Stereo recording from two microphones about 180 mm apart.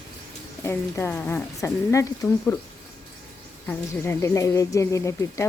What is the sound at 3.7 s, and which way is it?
Speech, 15° left (ahead or behind).